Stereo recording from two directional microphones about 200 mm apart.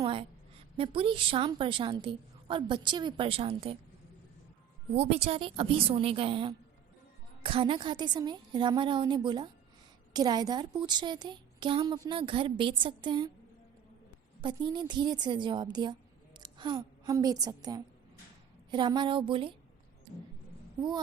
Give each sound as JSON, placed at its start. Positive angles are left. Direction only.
{"t": 0.0, "sound": "a woman's voice", "side_deg": -25}
{"t": 4.9, "sound": "a woman's voice", "side_deg": -30}
{"t": 14.4, "sound": "a woman's voice", "side_deg": -25}